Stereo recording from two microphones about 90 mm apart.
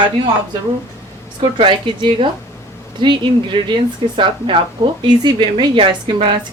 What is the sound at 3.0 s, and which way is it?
Speech, 60° right (ahead or behind).